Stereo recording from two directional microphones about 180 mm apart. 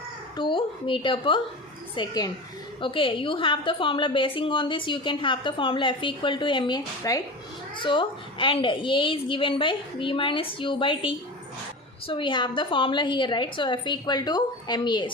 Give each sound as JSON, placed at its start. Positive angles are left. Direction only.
{"t": 0.3, "sound": "a woman's voice", "side_deg": 25}